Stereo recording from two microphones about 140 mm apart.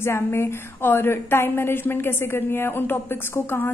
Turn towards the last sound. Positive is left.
turn(degrees=15)  # may be behind; listen again after turning